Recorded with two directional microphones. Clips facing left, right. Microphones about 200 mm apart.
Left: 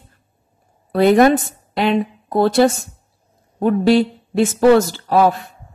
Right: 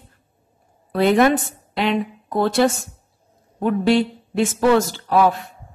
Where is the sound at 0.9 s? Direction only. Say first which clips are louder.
Left 4 dB; 40° left (ahead or behind).